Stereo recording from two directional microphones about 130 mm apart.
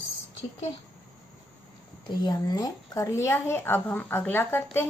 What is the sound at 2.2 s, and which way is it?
A woman's voice, 30° left (ahead or behind).